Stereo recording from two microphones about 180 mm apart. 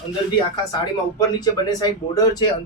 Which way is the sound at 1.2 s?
20° left (ahead or behind).